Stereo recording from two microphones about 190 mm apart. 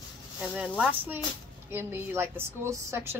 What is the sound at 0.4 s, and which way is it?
A woman's voice, 5° right (ahead or behind).